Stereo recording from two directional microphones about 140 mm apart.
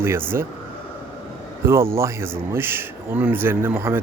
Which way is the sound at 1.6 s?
15° right (ahead or behind).